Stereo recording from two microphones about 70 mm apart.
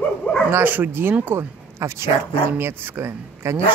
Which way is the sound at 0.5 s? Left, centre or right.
Right.